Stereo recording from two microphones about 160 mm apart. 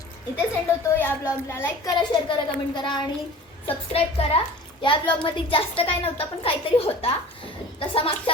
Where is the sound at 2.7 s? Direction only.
30° left (ahead or behind).